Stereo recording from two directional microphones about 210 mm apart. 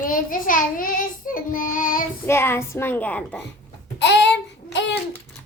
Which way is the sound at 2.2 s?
10° left (ahead or behind).